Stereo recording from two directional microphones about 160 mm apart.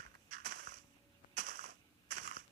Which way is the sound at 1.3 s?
55° right (ahead or behind).